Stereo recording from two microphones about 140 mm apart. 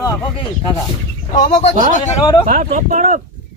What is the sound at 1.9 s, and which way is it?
Speech, 55° left (ahead or behind).